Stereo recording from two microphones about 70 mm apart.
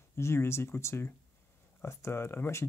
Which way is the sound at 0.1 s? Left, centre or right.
Left.